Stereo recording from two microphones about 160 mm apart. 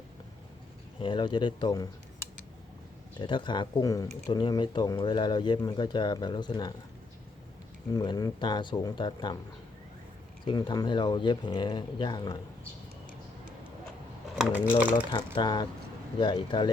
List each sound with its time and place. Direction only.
1.0 s speech: 30° left (ahead or behind)
3.2 s speech: 30° left (ahead or behind)
7.9 s speech: 25° left (ahead or behind)
10.4 s speech: 30° left (ahead or behind)
14.3 s speech: 10° right (ahead or behind)
15.4 s speech: 25° left (ahead or behind)